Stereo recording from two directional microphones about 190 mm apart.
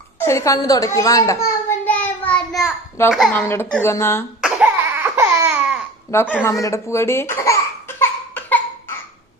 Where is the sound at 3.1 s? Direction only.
Centre (ahead or behind).